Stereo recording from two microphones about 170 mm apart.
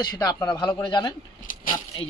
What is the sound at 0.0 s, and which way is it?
Speech, 20° left (ahead or behind).